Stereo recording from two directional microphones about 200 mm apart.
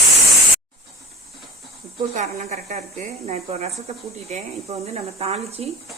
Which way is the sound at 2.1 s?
35° right (ahead or behind).